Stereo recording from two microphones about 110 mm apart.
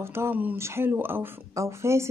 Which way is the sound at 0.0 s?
20° right (ahead or behind).